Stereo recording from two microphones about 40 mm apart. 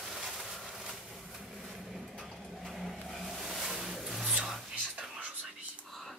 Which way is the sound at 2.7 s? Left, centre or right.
Centre.